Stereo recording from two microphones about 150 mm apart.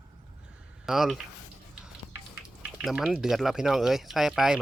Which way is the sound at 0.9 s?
Centre (ahead or behind).